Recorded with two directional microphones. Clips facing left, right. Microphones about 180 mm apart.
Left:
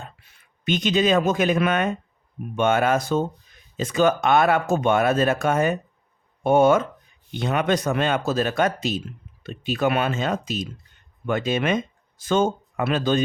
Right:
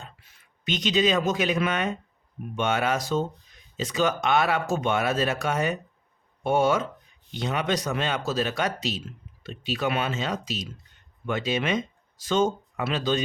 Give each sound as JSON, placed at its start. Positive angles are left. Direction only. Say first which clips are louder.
{"t": 0.0, "sound": "speech", "louder": "left 5 dB", "side_deg": 60}